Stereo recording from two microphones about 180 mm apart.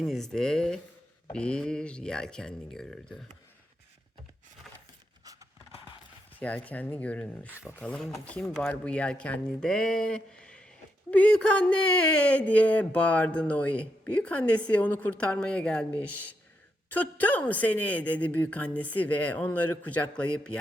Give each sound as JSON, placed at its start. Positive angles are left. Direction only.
{"t": 0.0, "sound": "speech", "side_deg": 0}
{"t": 5.2, "sound": "a sound", "side_deg": -20}
{"t": 6.4, "sound": "a woman's voice", "side_deg": 10}